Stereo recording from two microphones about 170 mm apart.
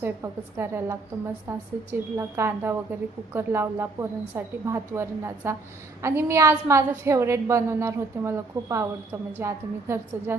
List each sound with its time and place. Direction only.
0.0 s a woman's voice: 15° right (ahead or behind)